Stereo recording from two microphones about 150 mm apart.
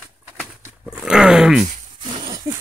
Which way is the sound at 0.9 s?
5° right (ahead or behind).